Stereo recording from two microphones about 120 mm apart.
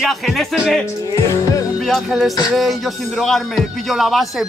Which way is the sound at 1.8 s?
Centre (ahead or behind).